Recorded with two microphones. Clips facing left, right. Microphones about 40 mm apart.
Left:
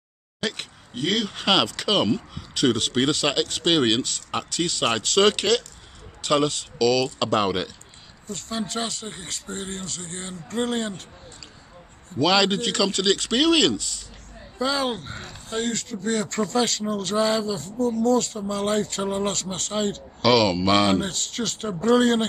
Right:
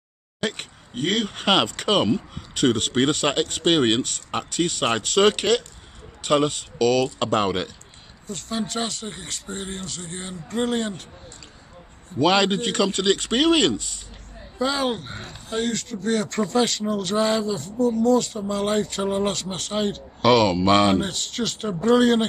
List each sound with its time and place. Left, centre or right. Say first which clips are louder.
1.0 s a man's voice: right 1 dB; right
5.2 s speech: right 1 dB; centre
6.2 s a man's voice: right 1 dB; right
6.8 s a man's voice: right 1 dB; right
8.3 s speech: right 1 dB; centre
12.2 s a man's voice: right 1 dB; right
14.6 s speech: right 1 dB; centre
20.2 s a man's voice: right 2 dB; right
20.9 s speech: right 1 dB; centre